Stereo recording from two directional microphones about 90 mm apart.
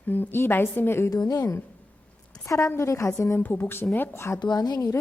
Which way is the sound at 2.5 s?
30° left (ahead or behind).